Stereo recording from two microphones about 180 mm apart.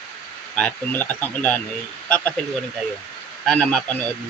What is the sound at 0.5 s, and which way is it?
Speech, 10° left (ahead or behind).